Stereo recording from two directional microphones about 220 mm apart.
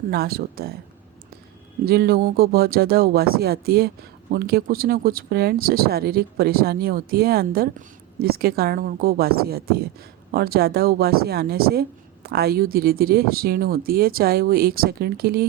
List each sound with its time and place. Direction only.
0.1 s speech: 45° right (ahead or behind)
1.8 s speech: 45° right (ahead or behind)